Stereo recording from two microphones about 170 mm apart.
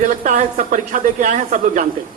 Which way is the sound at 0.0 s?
50° right (ahead or behind).